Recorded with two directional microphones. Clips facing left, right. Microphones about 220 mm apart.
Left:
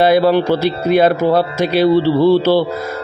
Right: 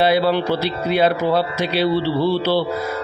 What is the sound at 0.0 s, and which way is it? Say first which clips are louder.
A man's voice: left 5 dB; 45° left (ahead or behind).